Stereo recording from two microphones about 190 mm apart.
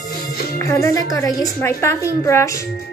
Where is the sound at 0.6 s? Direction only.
15° left (ahead or behind).